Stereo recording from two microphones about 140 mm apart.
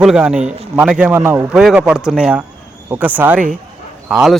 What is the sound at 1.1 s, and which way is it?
Speech, 20° right (ahead or behind).